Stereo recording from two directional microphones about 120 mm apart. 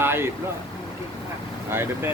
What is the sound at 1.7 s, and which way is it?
Speech, 20° right (ahead or behind).